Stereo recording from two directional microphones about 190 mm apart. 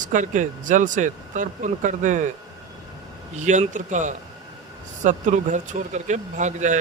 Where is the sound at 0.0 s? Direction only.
40° right (ahead or behind).